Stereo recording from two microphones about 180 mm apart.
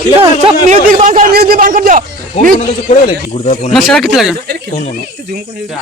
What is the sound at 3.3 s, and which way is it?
Speech, 35° left (ahead or behind).